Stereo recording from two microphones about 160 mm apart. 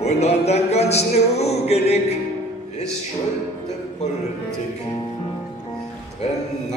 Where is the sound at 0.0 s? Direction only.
40° left (ahead or behind).